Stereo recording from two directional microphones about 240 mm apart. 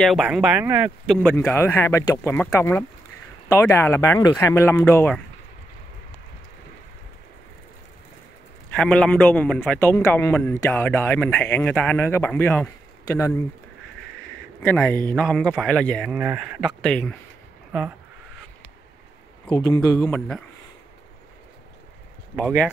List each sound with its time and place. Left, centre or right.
0.0 s a man's voice: centre
1.0 s a man's voice: centre
8.7 s a man's voice: centre
14.6 s a man's voice: centre
19.5 s speech: centre
20.0 s a man's voice: centre
22.3 s a man's voice: centre